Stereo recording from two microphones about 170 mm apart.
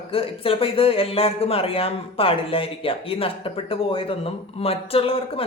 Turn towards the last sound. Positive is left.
turn(degrees=30)  # may be behind; listen again after turning